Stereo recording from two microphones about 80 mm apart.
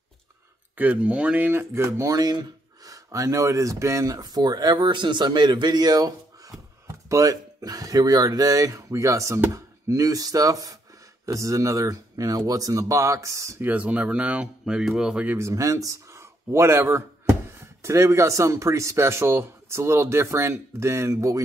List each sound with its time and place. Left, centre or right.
0.7 s speech: centre; by 2.1 s right
2.1 s speech: right
13.6 s speech: right
15.3 s speech: right